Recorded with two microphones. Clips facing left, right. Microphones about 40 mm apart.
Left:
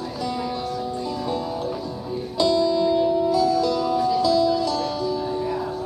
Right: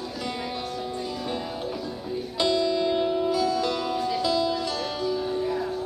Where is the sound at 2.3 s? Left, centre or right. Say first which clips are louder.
Left 4 dB; right.